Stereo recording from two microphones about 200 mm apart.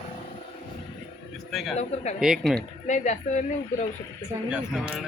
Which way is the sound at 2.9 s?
40° left (ahead or behind).